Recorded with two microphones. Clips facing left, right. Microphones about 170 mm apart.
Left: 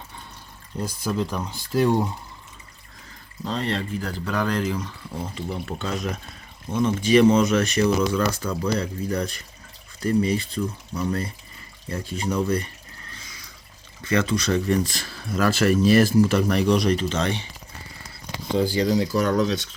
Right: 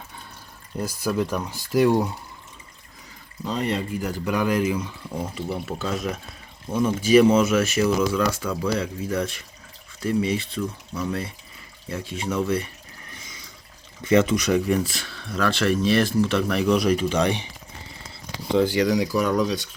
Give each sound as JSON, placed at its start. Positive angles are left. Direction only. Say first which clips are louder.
{"t": 0.9, "sound": "speech", "louder": "right 2 dB", "side_deg": -10}
{"t": 3.4, "sound": "speech", "louder": "right 1 dB", "side_deg": -10}
{"t": 13.1, "sound": "water", "louder": "right 1 dB", "side_deg": -20}
{"t": 14.0, "sound": "speech", "louder": "right 4 dB", "side_deg": -20}
{"t": 19.1, "sound": "speech", "louder": "left 1 dB", "side_deg": -10}